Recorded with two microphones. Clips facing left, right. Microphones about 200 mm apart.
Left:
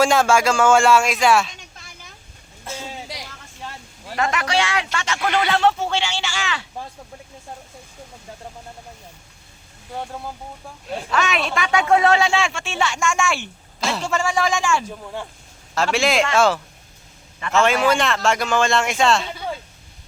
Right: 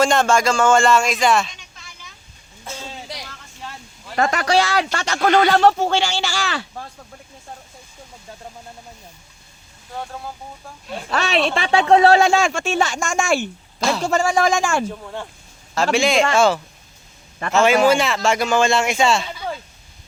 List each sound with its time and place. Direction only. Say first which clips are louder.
0.0 s speech: even; 5° left (ahead or behind)
1.7 s a sound: left 1 dB; 50° left (ahead or behind)
4.2 s speech: right 4 dB; 35° right (ahead or behind)
11.1 s speech: right 3 dB; 35° right (ahead or behind)
15.7 s speech: right 2 dB; centre (ahead or behind)